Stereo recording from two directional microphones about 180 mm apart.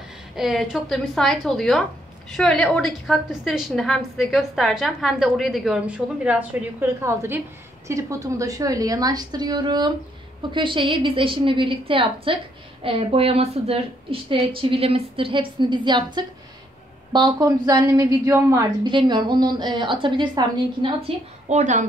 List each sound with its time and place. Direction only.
0.4 s a woman's voice: centre (ahead or behind); by 20.9 s 25° right (ahead or behind)
21.5 s a woman's voice: 40° right (ahead or behind)